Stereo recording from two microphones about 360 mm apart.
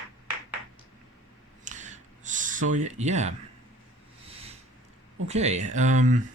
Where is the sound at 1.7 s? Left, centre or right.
Centre.